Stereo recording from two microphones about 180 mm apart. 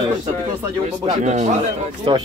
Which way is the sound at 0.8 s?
40° right (ahead or behind).